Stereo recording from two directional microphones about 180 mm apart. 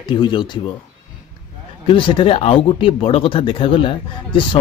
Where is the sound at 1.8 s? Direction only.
30° left (ahead or behind).